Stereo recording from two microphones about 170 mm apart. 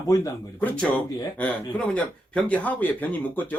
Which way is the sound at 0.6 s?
10° left (ahead or behind).